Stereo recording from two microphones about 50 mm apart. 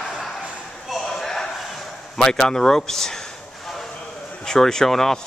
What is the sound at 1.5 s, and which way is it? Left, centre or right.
Bow-wow, centre.